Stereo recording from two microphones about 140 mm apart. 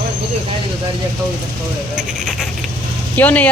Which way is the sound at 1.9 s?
Centre (ahead or behind).